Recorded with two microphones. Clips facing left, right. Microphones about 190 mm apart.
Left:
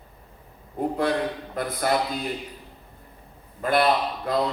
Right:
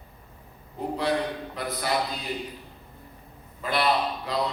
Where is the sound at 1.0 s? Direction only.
50° left (ahead or behind).